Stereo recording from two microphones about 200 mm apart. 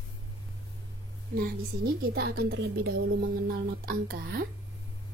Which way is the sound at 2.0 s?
50° right (ahead or behind).